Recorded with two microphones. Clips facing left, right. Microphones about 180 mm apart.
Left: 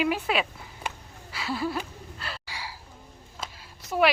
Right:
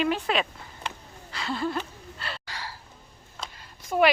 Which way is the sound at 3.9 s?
Centre (ahead or behind).